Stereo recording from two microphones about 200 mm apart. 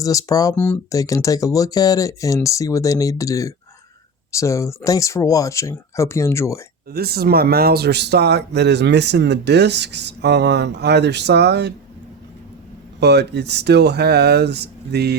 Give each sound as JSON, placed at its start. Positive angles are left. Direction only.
{"t": 0.0, "sound": "speech", "side_deg": 15}
{"t": 6.9, "sound": "speech", "side_deg": -50}
{"t": 13.0, "sound": "speech", "side_deg": -55}